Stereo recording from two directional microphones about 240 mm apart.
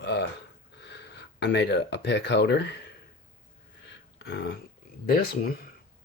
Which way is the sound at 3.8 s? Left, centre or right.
Left.